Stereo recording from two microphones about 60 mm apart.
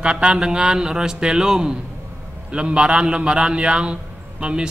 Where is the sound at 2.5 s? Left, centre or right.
Centre.